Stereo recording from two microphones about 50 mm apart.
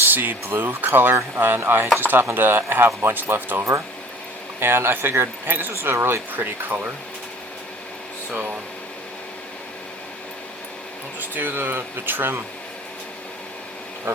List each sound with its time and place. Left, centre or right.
0.0 s speech: right
6.3 s speech: right
8.3 s speech: right
11.2 s speech: right